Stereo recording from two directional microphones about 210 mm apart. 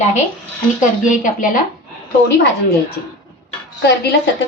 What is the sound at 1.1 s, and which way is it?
Speech, 40° left (ahead or behind).